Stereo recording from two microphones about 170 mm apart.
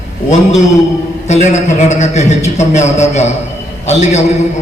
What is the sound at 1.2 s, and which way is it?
A man's voice, 45° left (ahead or behind).